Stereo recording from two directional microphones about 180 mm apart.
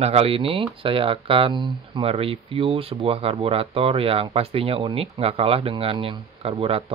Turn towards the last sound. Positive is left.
turn(degrees=-30)  # may be behind; listen again after turning